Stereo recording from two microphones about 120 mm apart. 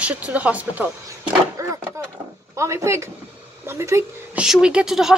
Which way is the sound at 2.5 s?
25° right (ahead or behind).